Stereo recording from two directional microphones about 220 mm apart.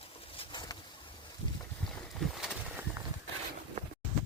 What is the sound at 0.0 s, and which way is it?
Pigeon, 25° left (ahead or behind).